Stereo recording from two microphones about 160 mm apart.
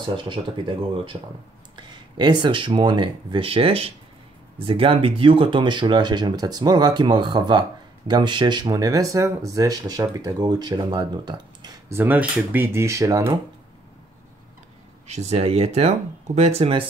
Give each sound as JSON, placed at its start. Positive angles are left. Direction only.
{"t": 0.1, "sound": "speech", "side_deg": -30}
{"t": 11.9, "sound": "speech", "side_deg": -10}
{"t": 15.0, "sound": "speech", "side_deg": -45}